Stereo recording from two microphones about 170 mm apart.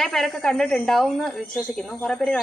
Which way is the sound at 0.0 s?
Centre (ahead or behind).